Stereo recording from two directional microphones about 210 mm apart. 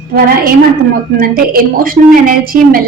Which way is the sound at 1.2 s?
45° right (ahead or behind).